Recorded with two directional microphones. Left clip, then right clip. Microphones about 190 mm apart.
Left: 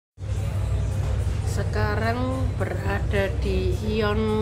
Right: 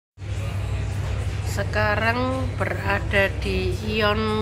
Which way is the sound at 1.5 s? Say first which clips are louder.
Right 5 dB; centre (ahead or behind).